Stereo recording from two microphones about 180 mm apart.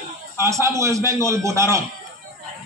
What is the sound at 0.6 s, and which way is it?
A man's voice, 15° right (ahead or behind).